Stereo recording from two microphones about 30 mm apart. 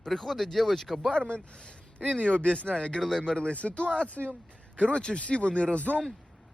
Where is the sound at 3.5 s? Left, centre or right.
Left.